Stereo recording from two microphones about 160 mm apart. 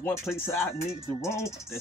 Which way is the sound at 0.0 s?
15° left (ahead or behind).